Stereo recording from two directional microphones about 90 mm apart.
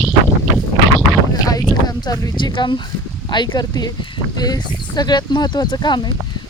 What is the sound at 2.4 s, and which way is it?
Speech, 60° left (ahead or behind).